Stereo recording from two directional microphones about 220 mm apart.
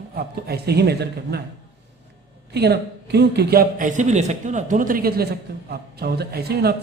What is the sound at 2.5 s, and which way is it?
A man's voice, 50° right (ahead or behind).